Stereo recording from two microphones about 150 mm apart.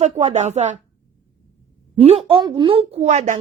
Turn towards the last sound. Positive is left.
turn(degrees=-50)  # may be behind; listen again after turning